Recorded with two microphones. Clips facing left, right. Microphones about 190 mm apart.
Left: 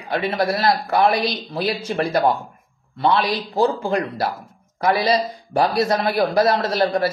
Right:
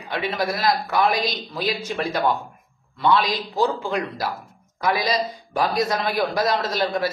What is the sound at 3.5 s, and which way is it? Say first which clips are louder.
A man's voice: left 3 dB; 35° left (ahead or behind).